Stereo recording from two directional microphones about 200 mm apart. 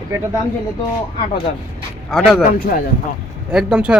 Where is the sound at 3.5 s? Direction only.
5° right (ahead or behind).